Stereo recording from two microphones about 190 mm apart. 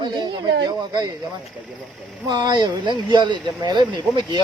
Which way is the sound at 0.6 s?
20° right (ahead or behind).